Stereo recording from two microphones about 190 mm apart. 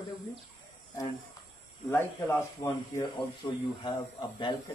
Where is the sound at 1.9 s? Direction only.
10° left (ahead or behind).